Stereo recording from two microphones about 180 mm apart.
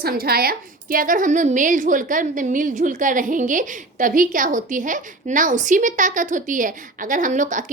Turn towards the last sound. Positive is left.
turn(degrees=-45)  # may be behind; listen again after turning